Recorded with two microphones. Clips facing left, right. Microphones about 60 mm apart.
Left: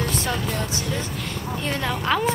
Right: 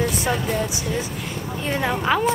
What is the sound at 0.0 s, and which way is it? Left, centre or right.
Vehicle, centre.